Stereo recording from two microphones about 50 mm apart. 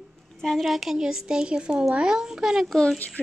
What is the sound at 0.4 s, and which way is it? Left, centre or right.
Speech, centre.